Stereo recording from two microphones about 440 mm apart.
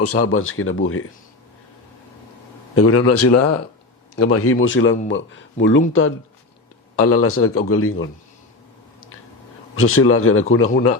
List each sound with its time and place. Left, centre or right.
0.0 s speech: left
2.7 s speech: left
9.7 s speech: left